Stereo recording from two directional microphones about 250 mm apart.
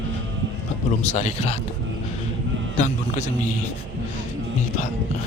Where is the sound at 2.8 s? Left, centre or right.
Left.